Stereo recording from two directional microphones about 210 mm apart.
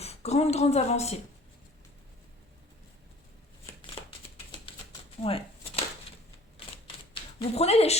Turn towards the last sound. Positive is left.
turn(degrees=30)  # may be behind; listen again after turning